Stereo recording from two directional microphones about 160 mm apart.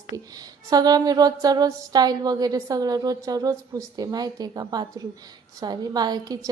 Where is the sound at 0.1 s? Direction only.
25° right (ahead or behind).